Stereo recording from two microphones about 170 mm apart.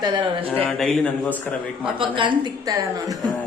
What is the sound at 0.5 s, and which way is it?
Speech, 5° left (ahead or behind).